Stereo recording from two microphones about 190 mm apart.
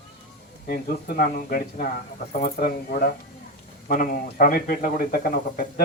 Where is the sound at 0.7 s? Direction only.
50° left (ahead or behind).